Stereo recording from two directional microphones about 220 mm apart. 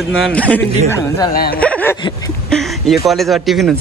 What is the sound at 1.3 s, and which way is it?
Speech, 45° left (ahead or behind).